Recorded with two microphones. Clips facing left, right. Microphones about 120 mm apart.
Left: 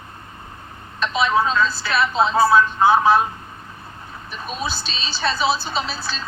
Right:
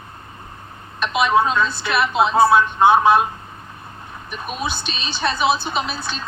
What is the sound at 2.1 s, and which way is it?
Speech, 20° right (ahead or behind).